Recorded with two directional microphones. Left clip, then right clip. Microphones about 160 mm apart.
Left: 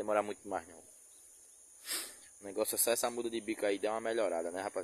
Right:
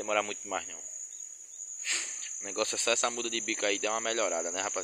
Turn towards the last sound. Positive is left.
turn(degrees=20)  # may be behind; listen again after turning